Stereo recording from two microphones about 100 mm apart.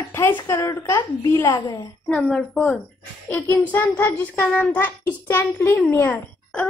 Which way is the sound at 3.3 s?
20° left (ahead or behind).